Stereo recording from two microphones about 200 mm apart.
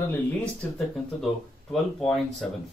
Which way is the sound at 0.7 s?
Centre (ahead or behind).